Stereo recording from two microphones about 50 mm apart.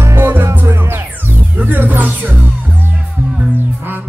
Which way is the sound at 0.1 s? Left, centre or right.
Right.